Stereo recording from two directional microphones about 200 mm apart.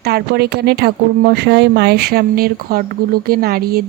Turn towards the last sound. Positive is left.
turn(degrees=-50)  # may be behind; listen again after turning